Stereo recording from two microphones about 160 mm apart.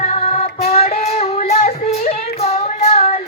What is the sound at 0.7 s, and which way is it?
Child singing, 40° left (ahead or behind).